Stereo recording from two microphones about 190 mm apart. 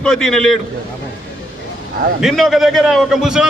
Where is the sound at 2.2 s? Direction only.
Centre (ahead or behind).